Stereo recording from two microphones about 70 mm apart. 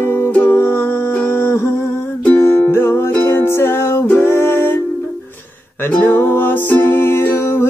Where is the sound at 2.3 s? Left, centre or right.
Left.